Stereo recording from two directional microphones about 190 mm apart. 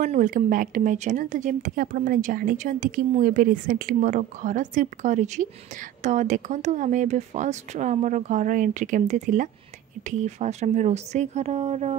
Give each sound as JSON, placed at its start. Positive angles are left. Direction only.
{"t": 0.0, "sound": "speech", "side_deg": -45}